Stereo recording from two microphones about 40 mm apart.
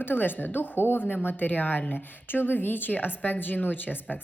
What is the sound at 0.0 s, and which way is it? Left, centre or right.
A woman's voice, left.